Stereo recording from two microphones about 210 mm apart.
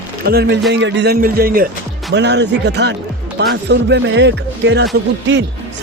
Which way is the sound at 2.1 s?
55° right (ahead or behind).